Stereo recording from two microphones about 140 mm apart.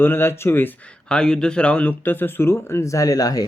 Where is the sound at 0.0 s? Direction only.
15° left (ahead or behind).